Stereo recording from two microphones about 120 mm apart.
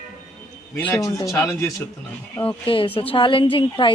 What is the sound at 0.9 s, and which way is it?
Speech, 30° left (ahead or behind).